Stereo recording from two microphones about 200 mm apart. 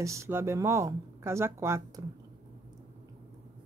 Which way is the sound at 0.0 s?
15° right (ahead or behind).